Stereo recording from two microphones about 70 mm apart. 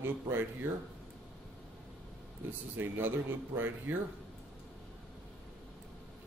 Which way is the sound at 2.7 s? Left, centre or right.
Right.